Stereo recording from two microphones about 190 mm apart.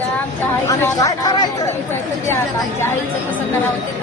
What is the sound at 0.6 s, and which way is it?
Speech, 20° left (ahead or behind).